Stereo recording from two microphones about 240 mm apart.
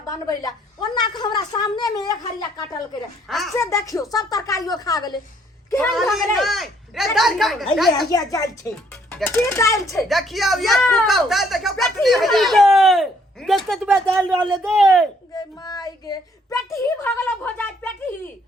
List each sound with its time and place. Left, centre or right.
0.1 s a woman's voice: centre
3.2 s speech: centre
3.7 s a woman's voice: centre
5.7 s speech: centre
8.1 s a woman's voice: centre
9.8 s speech: centre
15.6 s child singing: centre
16.7 s a woman's voice: centre